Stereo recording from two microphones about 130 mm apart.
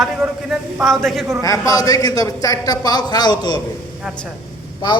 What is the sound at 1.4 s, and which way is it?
A man's voice, 25° left (ahead or behind).